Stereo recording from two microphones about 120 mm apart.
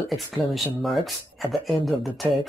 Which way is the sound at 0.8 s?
Centre (ahead or behind).